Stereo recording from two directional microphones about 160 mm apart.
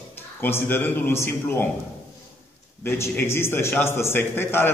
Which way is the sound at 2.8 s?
15° left (ahead or behind).